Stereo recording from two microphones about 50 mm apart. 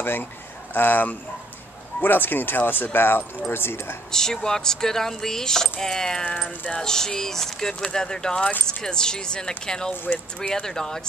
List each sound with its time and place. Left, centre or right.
0.0 s speech: left
4.1 s speech: centre